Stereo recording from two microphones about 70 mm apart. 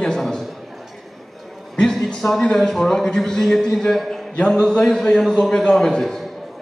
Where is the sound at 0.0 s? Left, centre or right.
Centre.